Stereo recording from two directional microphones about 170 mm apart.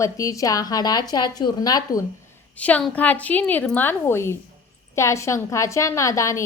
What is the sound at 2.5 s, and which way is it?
A woman's voice, 10° left (ahead or behind).